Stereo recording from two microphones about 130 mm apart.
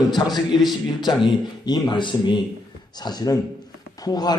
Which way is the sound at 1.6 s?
35° left (ahead or behind).